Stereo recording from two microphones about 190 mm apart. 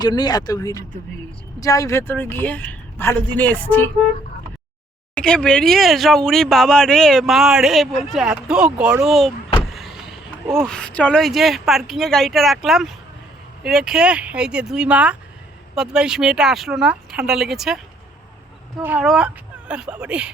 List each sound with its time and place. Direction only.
0.0 s speech: 20° left (ahead or behind)
5.1 s speech: 5° left (ahead or behind)
9.7 s vehicle: centre (ahead or behind)
10.7 s speech: 5° left (ahead or behind)
18.8 s speech: 10° right (ahead or behind)